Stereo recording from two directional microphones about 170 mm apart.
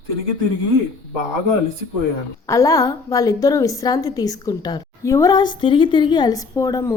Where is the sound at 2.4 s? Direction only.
20° left (ahead or behind).